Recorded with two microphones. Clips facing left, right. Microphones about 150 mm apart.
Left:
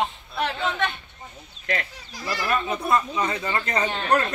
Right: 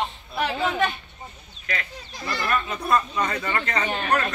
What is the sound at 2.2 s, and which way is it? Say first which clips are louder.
Speech: left 1 dB; 10° left (ahead or behind).